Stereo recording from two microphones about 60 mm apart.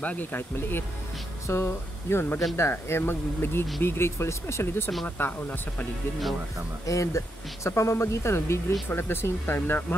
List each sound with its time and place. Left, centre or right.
0.0 s speech: left
5.0 s speech: left
6.9 s speech: left
8.8 s speech: left